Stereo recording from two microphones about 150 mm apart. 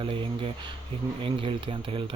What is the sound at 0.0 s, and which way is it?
Speech, 35° right (ahead or behind).